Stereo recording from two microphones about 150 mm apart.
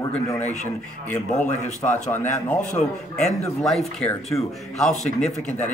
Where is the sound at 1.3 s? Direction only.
50° left (ahead or behind).